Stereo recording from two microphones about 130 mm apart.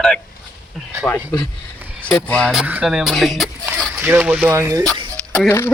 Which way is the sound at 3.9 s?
15° right (ahead or behind).